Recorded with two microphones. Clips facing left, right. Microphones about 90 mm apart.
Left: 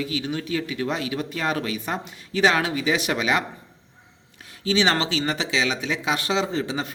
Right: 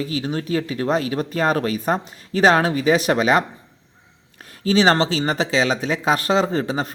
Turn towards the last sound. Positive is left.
turn(degrees=-40)  # may be behind; listen again after turning